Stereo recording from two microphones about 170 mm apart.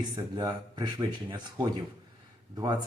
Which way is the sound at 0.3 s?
25° right (ahead or behind).